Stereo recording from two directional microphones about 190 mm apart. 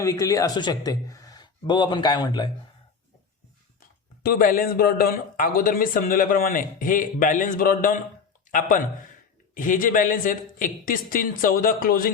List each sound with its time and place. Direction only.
0.0 s speech: 20° left (ahead or behind)
4.2 s a man's voice: 50° left (ahead or behind)
9.6 s a man's voice: 45° left (ahead or behind)